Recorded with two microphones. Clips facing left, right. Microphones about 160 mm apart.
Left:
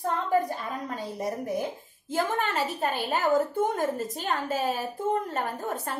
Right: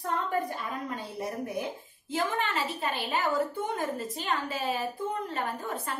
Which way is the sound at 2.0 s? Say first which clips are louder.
Left 3 dB; 45° left (ahead or behind).